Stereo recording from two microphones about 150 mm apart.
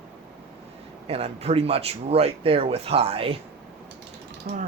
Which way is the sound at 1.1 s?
45° right (ahead or behind).